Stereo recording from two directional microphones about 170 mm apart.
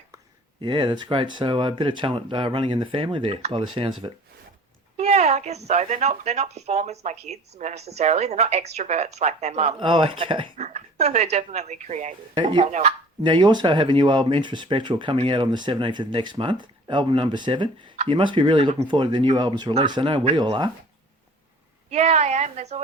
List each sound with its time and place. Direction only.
0.6 s speech: 25° right (ahead or behind)
4.9 s a woman's voice: 40° right (ahead or behind)
10.7 s speech: 40° right (ahead or behind)
12.4 s speech: 30° right (ahead or behind)
21.8 s a woman's voice: 40° right (ahead or behind)